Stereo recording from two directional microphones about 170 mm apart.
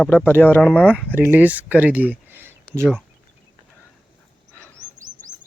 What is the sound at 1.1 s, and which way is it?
Speech, 10° right (ahead or behind).